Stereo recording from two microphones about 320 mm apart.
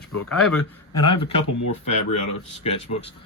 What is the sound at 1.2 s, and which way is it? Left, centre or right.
Speech, left.